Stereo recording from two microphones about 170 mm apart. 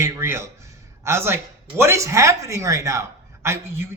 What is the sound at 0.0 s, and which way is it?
A man's voice, 15° right (ahead or behind).